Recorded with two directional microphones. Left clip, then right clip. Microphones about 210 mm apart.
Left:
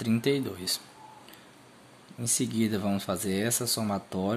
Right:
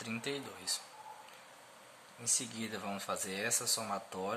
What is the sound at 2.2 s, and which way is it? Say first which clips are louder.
Speech: left 8 dB; 40° left (ahead or behind).